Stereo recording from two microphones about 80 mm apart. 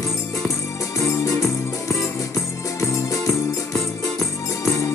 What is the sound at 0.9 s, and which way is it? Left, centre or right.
Music, left.